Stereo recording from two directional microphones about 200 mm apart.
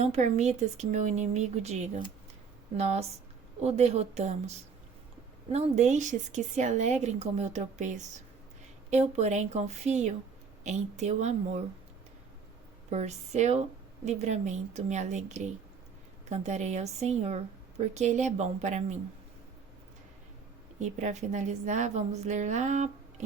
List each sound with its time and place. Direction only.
0.0 s a woman's voice: 35° right (ahead or behind)
12.9 s a woman's voice: 35° right (ahead or behind)
20.7 s a woman's voice: 35° right (ahead or behind)